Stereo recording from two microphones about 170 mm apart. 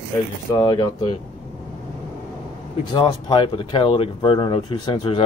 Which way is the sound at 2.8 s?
25° left (ahead or behind).